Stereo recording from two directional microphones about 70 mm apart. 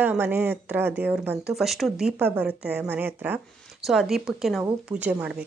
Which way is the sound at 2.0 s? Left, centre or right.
Centre.